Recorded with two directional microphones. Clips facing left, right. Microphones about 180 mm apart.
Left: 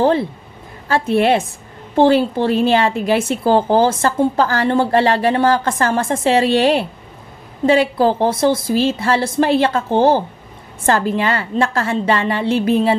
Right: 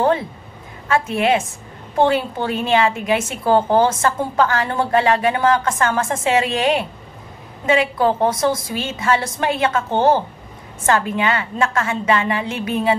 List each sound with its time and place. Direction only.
0.0 s a woman's voice: 30° left (ahead or behind)